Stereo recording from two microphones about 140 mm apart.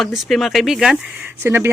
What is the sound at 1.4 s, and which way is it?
Speech, 15° right (ahead or behind).